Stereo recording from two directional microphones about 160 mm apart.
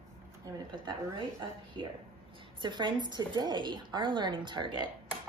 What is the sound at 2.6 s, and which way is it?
A woman's voice, 30° right (ahead or behind).